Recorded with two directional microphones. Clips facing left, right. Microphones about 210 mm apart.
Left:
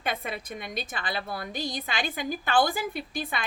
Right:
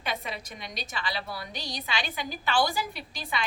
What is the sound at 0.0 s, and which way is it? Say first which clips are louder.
A woman's voice: left 2 dB; 50° left (ahead or behind).